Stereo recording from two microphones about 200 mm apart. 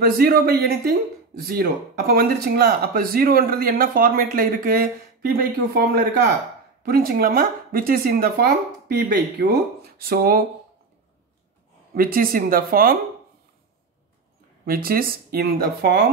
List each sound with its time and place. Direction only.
0.0 s speech: 50° right (ahead or behind)
11.9 s speech: 45° right (ahead or behind)
14.7 s speech: 45° right (ahead or behind)